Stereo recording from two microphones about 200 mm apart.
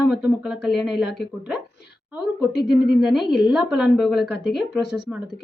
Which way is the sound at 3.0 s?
Centre (ahead or behind).